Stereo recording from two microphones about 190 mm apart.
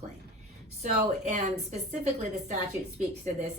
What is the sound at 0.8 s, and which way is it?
Speech, 35° right (ahead or behind).